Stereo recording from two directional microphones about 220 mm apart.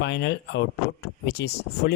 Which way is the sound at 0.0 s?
50° left (ahead or behind).